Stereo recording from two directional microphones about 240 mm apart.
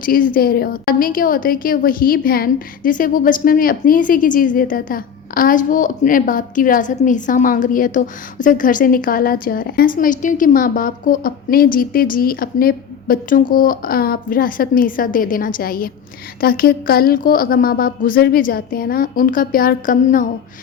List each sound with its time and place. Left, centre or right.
0.0 s a woman's voice: left